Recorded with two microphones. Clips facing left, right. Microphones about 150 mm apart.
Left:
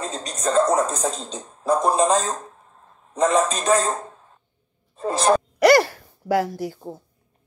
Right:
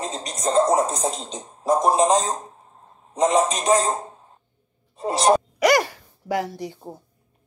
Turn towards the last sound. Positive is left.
turn(degrees=5)  # may be behind; listen again after turning